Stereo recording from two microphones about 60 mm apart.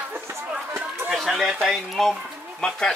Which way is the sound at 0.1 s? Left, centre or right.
Right.